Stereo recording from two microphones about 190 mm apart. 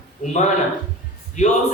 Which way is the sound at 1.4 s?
40° left (ahead or behind).